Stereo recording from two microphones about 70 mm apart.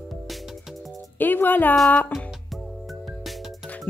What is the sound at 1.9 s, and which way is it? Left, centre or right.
Music, left.